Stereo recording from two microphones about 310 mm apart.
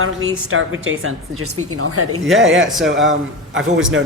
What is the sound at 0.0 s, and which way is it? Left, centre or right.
A woman's voice, right.